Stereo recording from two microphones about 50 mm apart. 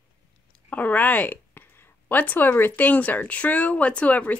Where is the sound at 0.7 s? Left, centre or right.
Left.